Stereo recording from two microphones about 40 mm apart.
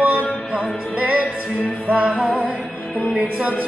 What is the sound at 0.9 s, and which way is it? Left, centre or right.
Music, right.